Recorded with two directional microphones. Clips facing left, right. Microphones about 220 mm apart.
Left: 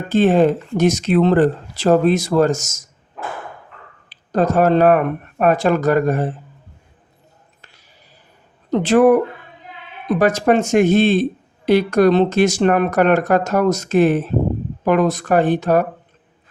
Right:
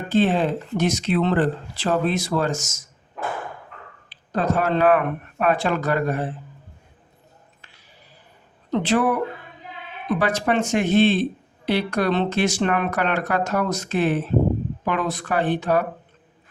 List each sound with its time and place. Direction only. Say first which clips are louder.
0.1 s speech: left 6 dB; 45° left (ahead or behind)
4.1 s speech: left 6 dB; 40° left (ahead or behind)
8.7 s speech: left 8 dB; 45° left (ahead or behind)